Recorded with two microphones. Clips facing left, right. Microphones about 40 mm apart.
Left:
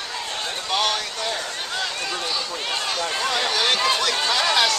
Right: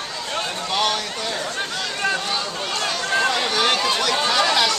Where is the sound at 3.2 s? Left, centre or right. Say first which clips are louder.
Left 1 dB; centre.